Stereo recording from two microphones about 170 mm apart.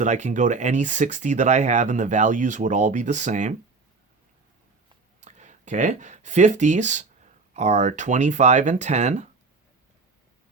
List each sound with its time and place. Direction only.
0.0 s speech: 45° right (ahead or behind)
5.2 s speech: 45° right (ahead or behind)